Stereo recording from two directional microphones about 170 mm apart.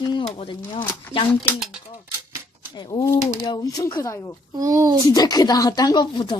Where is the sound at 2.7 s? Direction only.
20° left (ahead or behind).